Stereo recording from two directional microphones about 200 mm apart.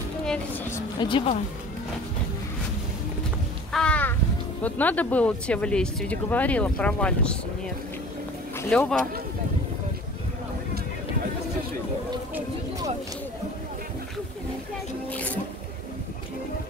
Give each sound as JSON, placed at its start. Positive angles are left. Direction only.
{"t": 0.2, "sound": "a sound", "side_deg": 5}
{"t": 0.7, "sound": "a sound", "side_deg": 25}
{"t": 3.7, "sound": "crow", "side_deg": 5}
{"t": 4.6, "sound": "speech", "side_deg": 10}
{"t": 8.5, "sound": "speech", "side_deg": 10}
{"t": 15.0, "sound": "music", "side_deg": 5}